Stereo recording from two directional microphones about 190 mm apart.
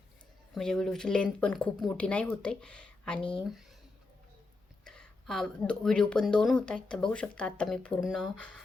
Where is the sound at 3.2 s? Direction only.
25° left (ahead or behind).